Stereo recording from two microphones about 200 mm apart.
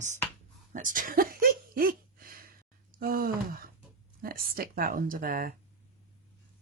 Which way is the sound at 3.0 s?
45° right (ahead or behind).